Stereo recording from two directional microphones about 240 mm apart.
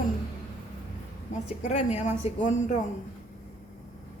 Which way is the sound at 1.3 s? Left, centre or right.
Left.